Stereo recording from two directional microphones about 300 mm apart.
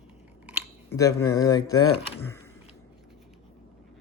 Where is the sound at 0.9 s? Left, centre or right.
Centre.